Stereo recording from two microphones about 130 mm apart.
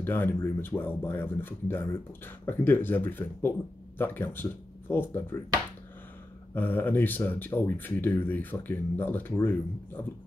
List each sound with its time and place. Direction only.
0.0 s speech: 15° left (ahead or behind)
6.5 s speech: 15° left (ahead or behind)